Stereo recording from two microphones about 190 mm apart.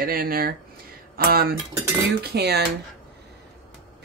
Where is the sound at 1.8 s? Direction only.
15° right (ahead or behind).